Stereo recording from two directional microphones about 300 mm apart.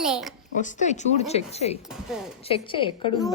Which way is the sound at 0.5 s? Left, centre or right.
Left.